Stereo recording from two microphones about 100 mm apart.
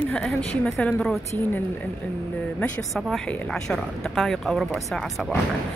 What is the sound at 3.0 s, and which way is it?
Speech, centre (ahead or behind).